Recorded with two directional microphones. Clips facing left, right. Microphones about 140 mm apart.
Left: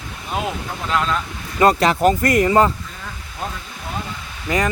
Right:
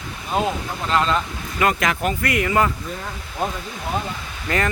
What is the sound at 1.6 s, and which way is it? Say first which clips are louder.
Speech: left 6 dB; 35° left (ahead or behind).